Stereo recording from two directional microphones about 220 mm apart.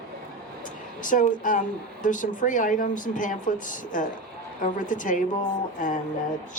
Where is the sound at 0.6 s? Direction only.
35° left (ahead or behind).